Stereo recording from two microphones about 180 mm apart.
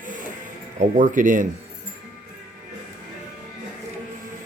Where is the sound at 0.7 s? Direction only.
45° right (ahead or behind).